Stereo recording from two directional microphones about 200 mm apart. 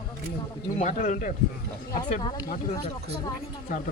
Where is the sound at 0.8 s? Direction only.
40° left (ahead or behind).